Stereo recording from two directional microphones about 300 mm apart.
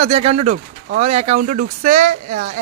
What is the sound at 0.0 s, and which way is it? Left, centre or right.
Speech, right.